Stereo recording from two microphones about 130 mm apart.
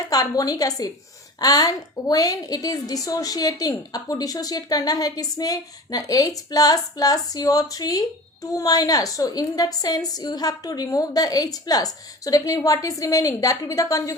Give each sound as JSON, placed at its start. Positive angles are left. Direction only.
{"t": 0.1, "sound": "a woman's voice", "side_deg": 25}